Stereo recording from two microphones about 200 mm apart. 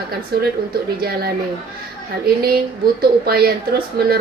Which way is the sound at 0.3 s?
50° right (ahead or behind).